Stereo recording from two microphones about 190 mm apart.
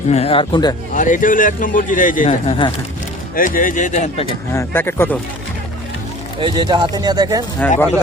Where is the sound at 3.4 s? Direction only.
45° left (ahead or behind).